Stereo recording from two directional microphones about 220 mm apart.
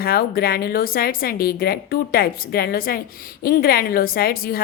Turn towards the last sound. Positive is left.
turn(degrees=40)  # may be behind; listen again after turning